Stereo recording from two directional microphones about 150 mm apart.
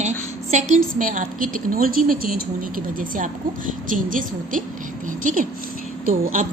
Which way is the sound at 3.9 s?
60° right (ahead or behind).